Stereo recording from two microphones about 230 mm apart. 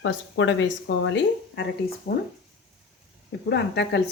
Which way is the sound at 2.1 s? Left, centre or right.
Left.